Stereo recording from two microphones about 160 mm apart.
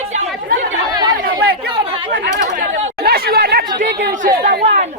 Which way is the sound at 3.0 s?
75° right (ahead or behind).